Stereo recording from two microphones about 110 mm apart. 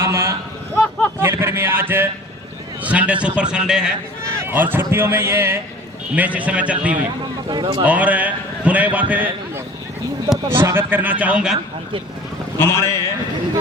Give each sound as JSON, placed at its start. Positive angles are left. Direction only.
{"t": 0.0, "sound": "a sound", "side_deg": -25}
{"t": 1.2, "sound": "a man's voice", "side_deg": -20}
{"t": 7.5, "sound": "a man's voice", "side_deg": -45}
{"t": 7.9, "sound": "a man's voice", "side_deg": -15}
{"t": 10.5, "sound": "a man's voice", "side_deg": -20}
{"t": 12.5, "sound": "a man's voice", "side_deg": 25}